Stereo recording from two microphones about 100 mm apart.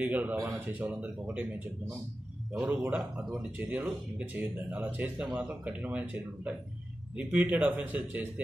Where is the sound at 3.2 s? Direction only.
10° right (ahead or behind).